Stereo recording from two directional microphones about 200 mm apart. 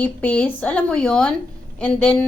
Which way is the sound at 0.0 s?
5° left (ahead or behind).